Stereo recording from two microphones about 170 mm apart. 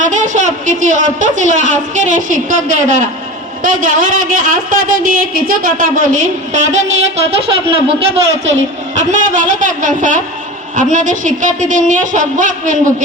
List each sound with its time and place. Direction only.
0.0 s speech: 45° right (ahead or behind)
9.0 s speech: 45° right (ahead or behind)